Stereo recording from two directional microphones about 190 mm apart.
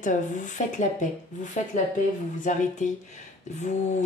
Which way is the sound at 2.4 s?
40° left (ahead or behind).